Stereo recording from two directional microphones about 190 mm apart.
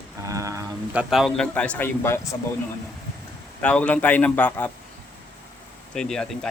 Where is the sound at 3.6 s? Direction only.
5° left (ahead or behind).